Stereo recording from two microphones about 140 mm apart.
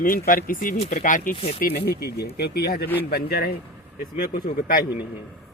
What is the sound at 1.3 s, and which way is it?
Speech, 45° left (ahead or behind).